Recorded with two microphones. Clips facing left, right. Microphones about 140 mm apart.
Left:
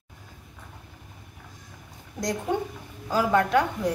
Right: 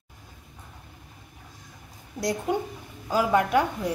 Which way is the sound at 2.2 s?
5° right (ahead or behind).